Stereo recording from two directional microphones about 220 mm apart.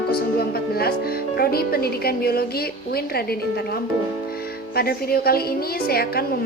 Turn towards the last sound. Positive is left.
turn(degrees=45)  # may be behind; listen again after turning